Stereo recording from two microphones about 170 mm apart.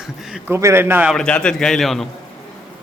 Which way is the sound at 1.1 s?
5° left (ahead or behind).